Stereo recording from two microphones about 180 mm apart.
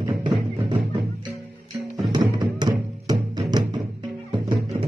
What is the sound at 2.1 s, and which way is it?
Music, 25° right (ahead or behind).